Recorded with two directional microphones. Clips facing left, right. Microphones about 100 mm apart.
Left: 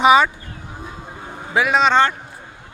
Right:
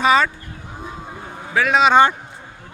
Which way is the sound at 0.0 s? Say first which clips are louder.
Left 3 dB; 15° left (ahead or behind).